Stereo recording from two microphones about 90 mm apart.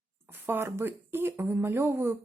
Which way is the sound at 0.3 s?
25° right (ahead or behind).